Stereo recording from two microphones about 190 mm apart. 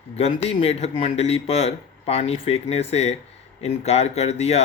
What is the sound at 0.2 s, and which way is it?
Speech, 30° left (ahead or behind).